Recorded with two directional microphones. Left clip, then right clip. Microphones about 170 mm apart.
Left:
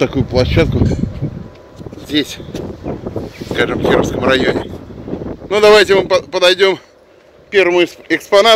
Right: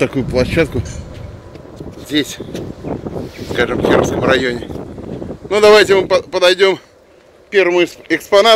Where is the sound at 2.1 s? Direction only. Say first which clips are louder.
Left 1 dB; 10° left (ahead or behind).